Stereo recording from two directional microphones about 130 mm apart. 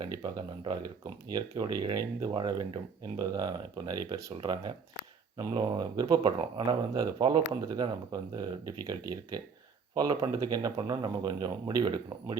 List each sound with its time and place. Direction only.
0.0 s speech: 35° right (ahead or behind)